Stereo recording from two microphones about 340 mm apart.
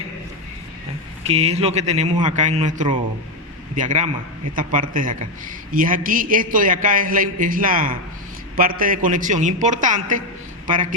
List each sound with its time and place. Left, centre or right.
1.3 s a man's voice: centre